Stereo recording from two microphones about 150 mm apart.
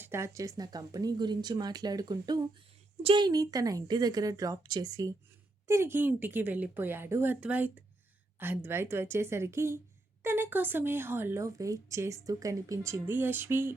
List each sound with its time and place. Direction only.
0.0 s a woman's voice: 20° right (ahead or behind)